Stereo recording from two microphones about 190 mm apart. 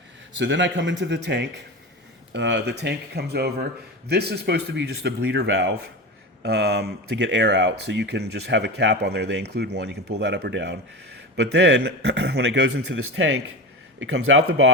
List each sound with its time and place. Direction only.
0.3 s a man's voice: 75° right (ahead or behind)
14.0 s speech: 90° right